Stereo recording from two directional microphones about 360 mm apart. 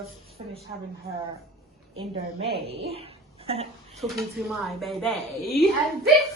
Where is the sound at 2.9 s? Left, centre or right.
Centre.